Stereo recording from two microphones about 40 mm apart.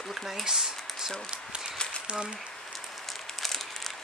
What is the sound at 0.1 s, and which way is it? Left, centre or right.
Speech, centre.